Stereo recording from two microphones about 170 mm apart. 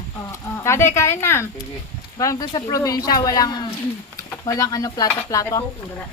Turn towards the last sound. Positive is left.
turn(degrees=20)  # may be behind; listen again after turning